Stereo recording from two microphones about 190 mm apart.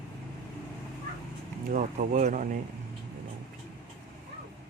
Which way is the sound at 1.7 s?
45° right (ahead or behind).